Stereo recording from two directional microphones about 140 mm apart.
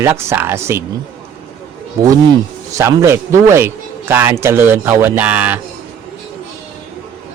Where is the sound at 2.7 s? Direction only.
20° right (ahead or behind).